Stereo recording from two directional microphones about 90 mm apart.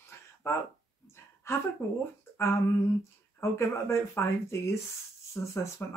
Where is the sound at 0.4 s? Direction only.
25° left (ahead or behind).